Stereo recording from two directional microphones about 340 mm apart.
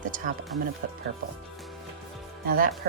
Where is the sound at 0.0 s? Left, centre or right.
Right.